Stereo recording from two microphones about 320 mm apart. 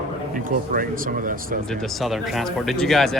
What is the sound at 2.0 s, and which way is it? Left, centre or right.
Speech, centre.